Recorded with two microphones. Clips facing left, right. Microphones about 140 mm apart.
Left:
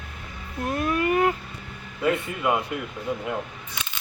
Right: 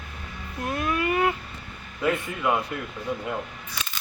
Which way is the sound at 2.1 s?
10° left (ahead or behind).